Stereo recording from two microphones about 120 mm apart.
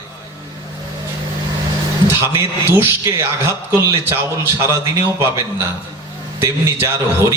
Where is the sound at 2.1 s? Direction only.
20° right (ahead or behind).